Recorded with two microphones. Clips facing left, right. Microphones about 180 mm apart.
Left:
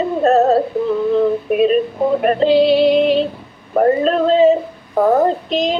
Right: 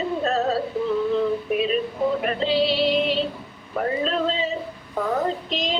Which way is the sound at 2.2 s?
50° left (ahead or behind).